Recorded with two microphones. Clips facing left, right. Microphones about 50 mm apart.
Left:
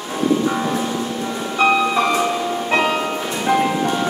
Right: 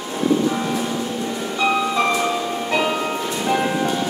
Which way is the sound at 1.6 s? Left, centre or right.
Left.